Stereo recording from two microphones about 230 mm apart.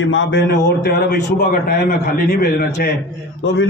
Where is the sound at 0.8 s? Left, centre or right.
Left.